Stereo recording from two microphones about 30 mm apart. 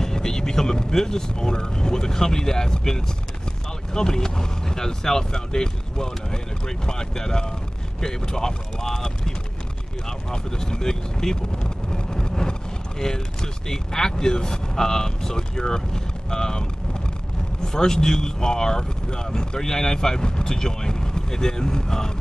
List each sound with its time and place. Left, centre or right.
0.0 s speech: centre
11.9 s vehicle: left
13.0 s speech: centre
17.6 s speech: left